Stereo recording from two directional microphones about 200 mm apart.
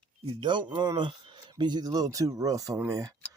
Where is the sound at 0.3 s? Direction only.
25° right (ahead or behind).